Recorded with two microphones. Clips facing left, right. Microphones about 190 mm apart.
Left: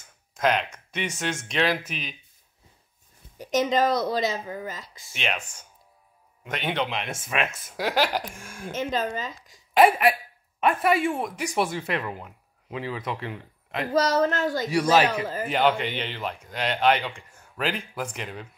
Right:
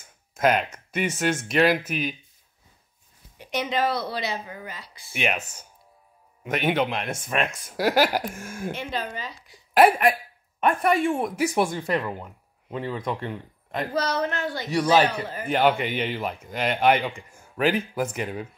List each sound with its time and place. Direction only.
0.3 s speech: 5° right (ahead or behind)
3.3 s speech: 40° left (ahead or behind)
5.1 s a man's voice: 10° right (ahead or behind)
6.4 s speech: 10° right (ahead or behind)
8.7 s speech: 45° left (ahead or behind)
9.8 s speech: centre (ahead or behind)
11.1 s speech: 5° right (ahead or behind)
13.9 s speech: 40° left (ahead or behind)
14.7 s speech: 10° left (ahead or behind)
15.4 s a man's voice: 5° right (ahead or behind)